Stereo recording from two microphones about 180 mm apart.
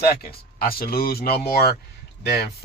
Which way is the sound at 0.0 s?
60° left (ahead or behind).